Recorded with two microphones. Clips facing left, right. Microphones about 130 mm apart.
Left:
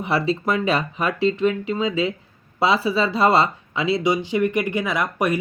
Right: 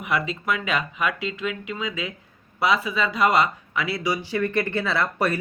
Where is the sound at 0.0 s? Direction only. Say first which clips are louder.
Left 5 dB; 30° left (ahead or behind).